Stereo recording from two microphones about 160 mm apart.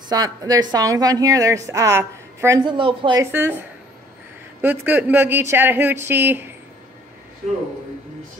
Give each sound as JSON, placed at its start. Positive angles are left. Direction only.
{"t": 0.1, "sound": "a woman's voice", "side_deg": -25}
{"t": 2.6, "sound": "speech", "side_deg": -30}
{"t": 3.2, "sound": "speech", "side_deg": -15}